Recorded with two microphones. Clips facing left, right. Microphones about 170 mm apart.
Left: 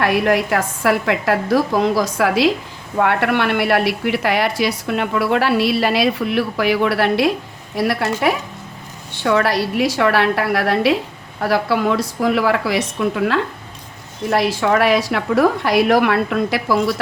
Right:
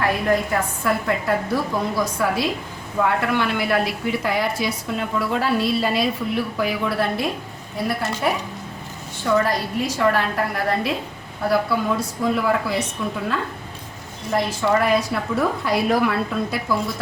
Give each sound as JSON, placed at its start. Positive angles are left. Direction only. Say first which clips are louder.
{"t": 0.0, "sound": "a woman's voice", "louder": "left 4 dB", "side_deg": 80}
{"t": 3.0, "sound": "a woman's voice", "louder": "left 4 dB", "side_deg": 70}